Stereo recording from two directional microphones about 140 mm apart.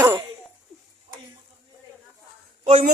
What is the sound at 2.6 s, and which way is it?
Speech, 60° right (ahead or behind).